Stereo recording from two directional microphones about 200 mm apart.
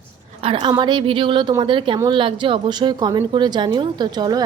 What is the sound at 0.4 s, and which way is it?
A woman's voice, 25° right (ahead or behind).